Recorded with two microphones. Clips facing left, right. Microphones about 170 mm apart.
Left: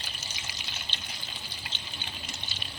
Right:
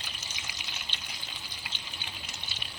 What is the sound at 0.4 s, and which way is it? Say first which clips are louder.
Water: left 1 dB; 10° right (ahead or behind).